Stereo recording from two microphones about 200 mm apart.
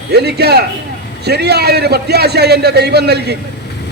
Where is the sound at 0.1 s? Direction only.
55° right (ahead or behind).